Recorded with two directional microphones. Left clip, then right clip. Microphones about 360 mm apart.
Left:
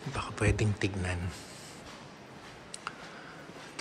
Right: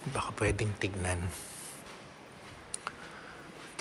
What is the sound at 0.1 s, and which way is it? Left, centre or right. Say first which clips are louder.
Speech: even; centre.